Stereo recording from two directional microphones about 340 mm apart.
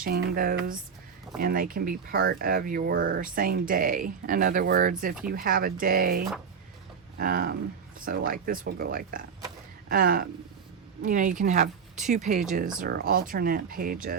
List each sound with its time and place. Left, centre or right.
0.0 s speech: right